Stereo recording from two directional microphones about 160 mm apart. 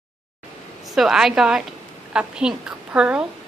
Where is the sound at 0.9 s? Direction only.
5° right (ahead or behind).